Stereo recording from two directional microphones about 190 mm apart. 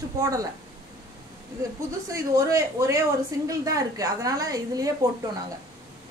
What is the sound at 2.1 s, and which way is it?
A woman's voice, 15° right (ahead or behind).